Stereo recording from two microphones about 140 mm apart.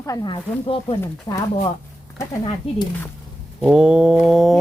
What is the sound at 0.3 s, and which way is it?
Speech, 40° left (ahead or behind).